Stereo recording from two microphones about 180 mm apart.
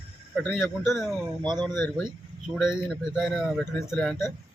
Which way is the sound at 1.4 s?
25° right (ahead or behind).